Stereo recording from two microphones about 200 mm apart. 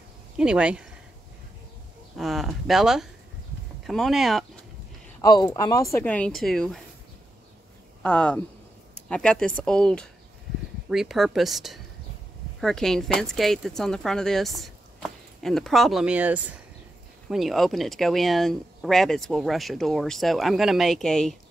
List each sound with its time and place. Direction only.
0.4 s speech: 5° right (ahead or behind)
2.1 s speech: centre (ahead or behind)
5.2 s speech: 20° left (ahead or behind); by 6.8 s centre (ahead or behind)
8.0 s speech: 5° left (ahead or behind)